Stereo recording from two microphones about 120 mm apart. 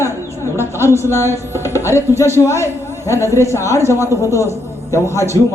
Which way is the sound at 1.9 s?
25° left (ahead or behind).